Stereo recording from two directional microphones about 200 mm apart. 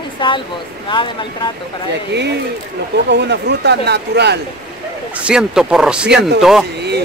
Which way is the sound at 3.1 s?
60° right (ahead or behind).